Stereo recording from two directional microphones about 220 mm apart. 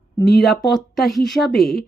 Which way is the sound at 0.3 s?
Centre (ahead or behind).